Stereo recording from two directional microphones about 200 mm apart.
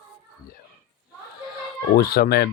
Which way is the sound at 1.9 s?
50° left (ahead or behind).